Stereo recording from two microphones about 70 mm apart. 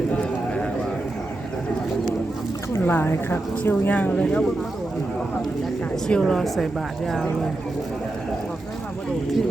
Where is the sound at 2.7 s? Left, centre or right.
Left; by 4.4 s centre.